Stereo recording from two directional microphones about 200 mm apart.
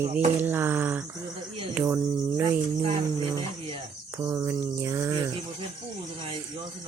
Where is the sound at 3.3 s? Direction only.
25° right (ahead or behind).